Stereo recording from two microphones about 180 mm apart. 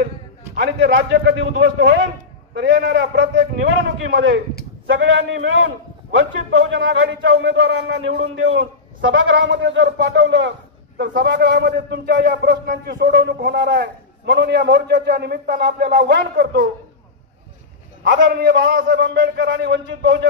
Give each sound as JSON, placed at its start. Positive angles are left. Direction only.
{"t": 0.6, "sound": "a man's voice", "side_deg": -75}
{"t": 8.5, "sound": "a man's voice", "side_deg": -90}
{"t": 11.0, "sound": "a man's voice", "side_deg": -70}
{"t": 18.0, "sound": "a man's voice", "side_deg": -70}